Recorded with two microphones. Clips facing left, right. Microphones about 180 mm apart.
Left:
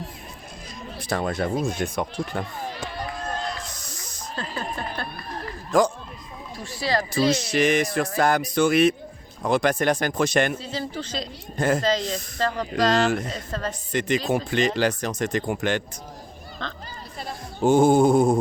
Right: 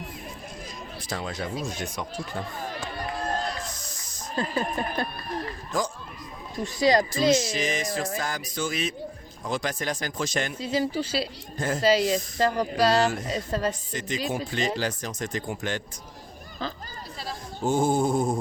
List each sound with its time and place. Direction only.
1.0 s speech: 60° left (ahead or behind)
4.4 s speech: 15° right (ahead or behind)
6.6 s speech: 20° right (ahead or behind)
7.1 s speech: 65° left (ahead or behind)
10.6 s speech: 10° right (ahead or behind)
11.5 s speech: 65° left (ahead or behind)
11.8 s speech: 10° right (ahead or behind)
14.3 s speech: 70° left (ahead or behind)
17.6 s speech: 70° left (ahead or behind)